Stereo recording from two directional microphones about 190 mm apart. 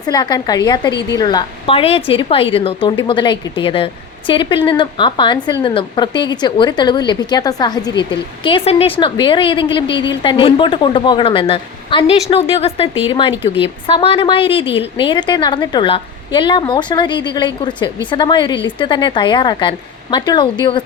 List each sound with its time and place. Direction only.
0.0 s a woman's voice: 20° left (ahead or behind)